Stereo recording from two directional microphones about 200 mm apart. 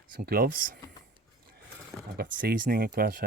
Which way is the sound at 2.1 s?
50° right (ahead or behind).